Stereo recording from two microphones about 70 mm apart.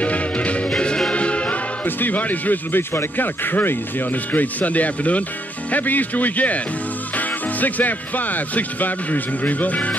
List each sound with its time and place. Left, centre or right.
0.0 s music: centre
5.7 s speech: left